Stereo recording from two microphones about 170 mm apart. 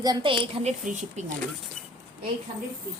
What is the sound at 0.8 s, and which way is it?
Speech, 45° right (ahead or behind).